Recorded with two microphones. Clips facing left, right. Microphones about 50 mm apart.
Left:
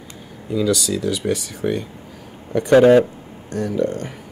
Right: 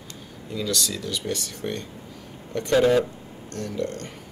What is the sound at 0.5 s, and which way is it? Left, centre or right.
Speech, centre.